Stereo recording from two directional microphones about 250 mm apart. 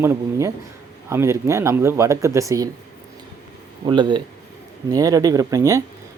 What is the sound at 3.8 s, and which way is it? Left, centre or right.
Speech, centre.